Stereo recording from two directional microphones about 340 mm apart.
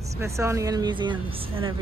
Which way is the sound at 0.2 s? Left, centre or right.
Centre.